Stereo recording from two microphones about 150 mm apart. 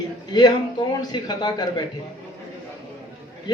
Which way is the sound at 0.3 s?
30° left (ahead or behind).